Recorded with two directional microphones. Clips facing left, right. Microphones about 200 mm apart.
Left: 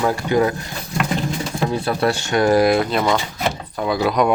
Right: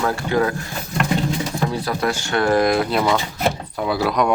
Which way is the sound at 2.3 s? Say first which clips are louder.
Left 2 dB; 15° left (ahead or behind).